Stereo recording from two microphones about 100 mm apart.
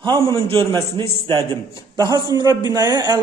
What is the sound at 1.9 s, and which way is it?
A man's voice, 40° right (ahead or behind).